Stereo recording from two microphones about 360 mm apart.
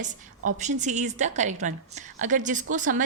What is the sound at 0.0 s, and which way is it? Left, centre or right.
A woman's voice, centre.